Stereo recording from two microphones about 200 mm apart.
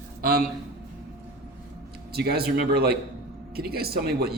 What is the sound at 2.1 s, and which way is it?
Speech, 50° right (ahead or behind).